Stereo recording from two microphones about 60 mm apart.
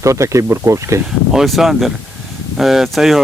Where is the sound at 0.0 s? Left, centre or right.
Right.